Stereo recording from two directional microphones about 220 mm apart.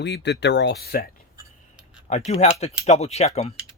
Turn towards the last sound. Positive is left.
turn(degrees=30)  # may be behind; listen again after turning